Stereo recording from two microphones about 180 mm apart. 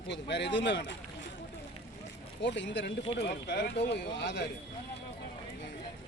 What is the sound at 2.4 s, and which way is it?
Speech, 75° left (ahead or behind).